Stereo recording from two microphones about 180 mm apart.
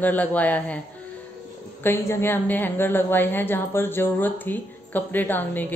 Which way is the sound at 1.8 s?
15° left (ahead or behind).